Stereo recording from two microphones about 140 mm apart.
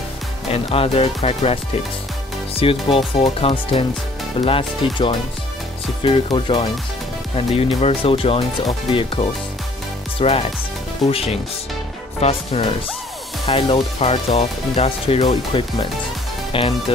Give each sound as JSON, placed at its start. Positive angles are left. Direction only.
{"t": 0.5, "sound": "speech", "side_deg": 45}